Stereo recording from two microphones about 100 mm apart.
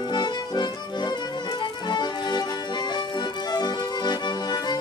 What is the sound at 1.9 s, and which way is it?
Music, 45° left (ahead or behind).